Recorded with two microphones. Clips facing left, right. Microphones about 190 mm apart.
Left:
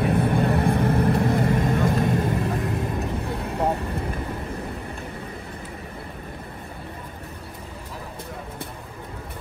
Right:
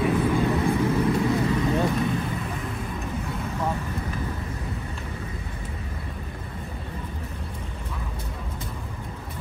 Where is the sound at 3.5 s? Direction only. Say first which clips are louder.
Left 5 dB; 65° left (ahead or behind).